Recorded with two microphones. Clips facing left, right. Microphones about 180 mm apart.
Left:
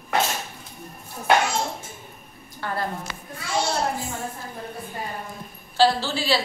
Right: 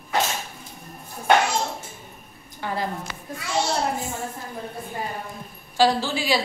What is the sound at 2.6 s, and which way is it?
Speech, 15° right (ahead or behind).